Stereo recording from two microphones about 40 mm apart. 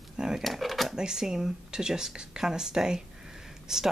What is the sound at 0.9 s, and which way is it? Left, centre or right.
Speech, centre.